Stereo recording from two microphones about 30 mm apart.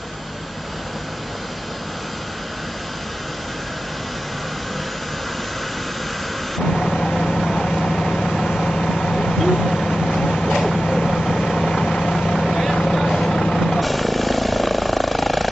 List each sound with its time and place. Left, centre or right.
6.7 s vehicle: centre
9.4 s vehicle: centre